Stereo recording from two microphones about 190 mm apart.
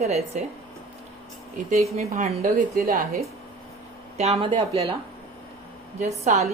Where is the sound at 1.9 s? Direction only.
35° right (ahead or behind); by 3.2 s 50° right (ahead or behind).